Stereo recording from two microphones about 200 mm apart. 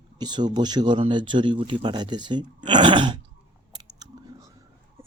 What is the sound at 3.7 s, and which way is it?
Chewing, 20° right (ahead or behind).